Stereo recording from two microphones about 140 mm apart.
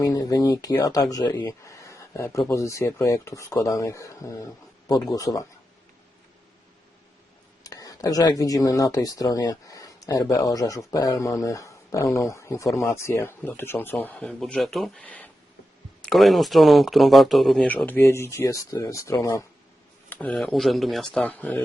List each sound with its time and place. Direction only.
0.0 s speech: 25° left (ahead or behind)
7.6 s speech: 25° left (ahead or behind); by 17.7 s centre (ahead or behind)
17.8 s speech: 15° left (ahead or behind)
20.1 s speech: 10° left (ahead or behind)